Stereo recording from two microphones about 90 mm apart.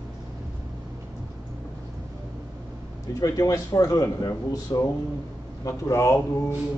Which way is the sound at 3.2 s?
40° left (ahead or behind).